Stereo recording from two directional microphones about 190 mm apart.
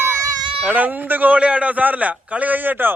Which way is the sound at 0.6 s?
10° right (ahead or behind).